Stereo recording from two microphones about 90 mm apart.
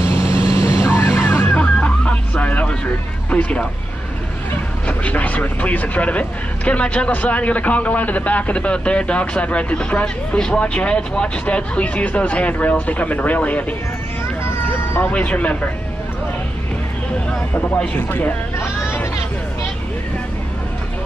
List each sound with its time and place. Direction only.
0.0 s vehicle: 30° left (ahead or behind)
0.9 s music: 30° left (ahead or behind)
1.5 s music: 15° left (ahead or behind)
3.3 s speech: 15° left (ahead or behind)
4.8 s speech: 15° left (ahead or behind)
15.0 s speech: 15° left (ahead or behind)
17.9 s speech: 20° left (ahead or behind)